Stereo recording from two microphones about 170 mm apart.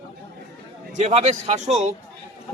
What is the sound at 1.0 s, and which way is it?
Speech, 40° right (ahead or behind).